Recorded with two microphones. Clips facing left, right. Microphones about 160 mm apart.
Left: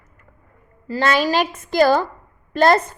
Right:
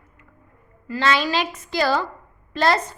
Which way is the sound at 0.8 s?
40° left (ahead or behind).